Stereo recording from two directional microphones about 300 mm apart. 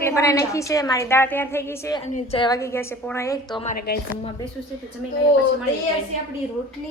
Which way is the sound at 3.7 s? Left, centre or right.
Left.